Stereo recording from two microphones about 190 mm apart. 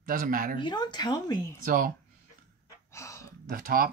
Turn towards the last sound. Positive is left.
turn(degrees=-50)  # may be behind; listen again after turning